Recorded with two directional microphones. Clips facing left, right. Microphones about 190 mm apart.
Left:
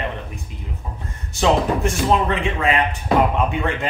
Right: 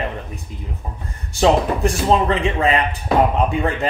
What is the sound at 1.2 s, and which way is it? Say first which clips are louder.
Speech: right 2 dB; 35° right (ahead or behind).